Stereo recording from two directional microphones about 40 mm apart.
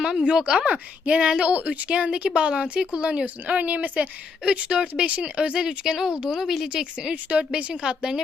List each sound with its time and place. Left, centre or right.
0.2 s speech: right
0.6 s speech: right
1.9 s speech: right
3.4 s speech: right
4.4 s speech: right
5.5 s speech: centre
6.4 s speech: centre
7.0 s speech: right
7.7 s a woman's voice: centre